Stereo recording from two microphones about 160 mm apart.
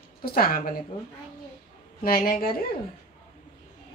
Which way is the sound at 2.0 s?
65° left (ahead or behind).